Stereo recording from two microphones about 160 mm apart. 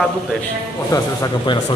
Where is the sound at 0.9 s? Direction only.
20° left (ahead or behind).